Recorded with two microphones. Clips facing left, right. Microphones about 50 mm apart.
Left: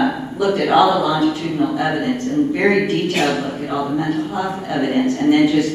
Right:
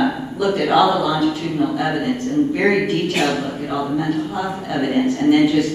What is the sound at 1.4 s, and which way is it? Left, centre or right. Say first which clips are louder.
Speech: left 1 dB; left.